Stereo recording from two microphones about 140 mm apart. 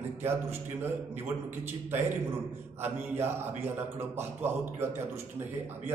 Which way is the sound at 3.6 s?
15° right (ahead or behind).